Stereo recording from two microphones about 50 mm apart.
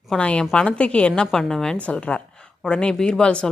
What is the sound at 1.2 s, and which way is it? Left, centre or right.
Speech, centre.